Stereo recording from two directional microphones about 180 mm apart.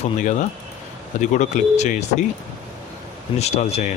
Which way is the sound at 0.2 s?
40° left (ahead or behind).